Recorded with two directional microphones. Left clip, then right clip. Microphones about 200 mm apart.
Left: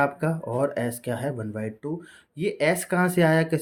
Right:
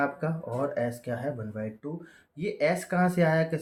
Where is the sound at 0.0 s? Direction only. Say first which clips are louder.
Left 5 dB; 45° left (ahead or behind).